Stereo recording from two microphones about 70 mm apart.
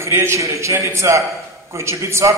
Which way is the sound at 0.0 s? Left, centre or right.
Right.